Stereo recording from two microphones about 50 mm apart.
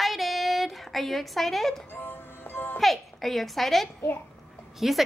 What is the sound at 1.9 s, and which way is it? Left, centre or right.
Music, left.